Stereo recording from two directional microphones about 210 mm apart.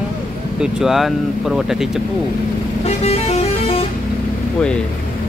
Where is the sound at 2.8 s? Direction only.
30° left (ahead or behind).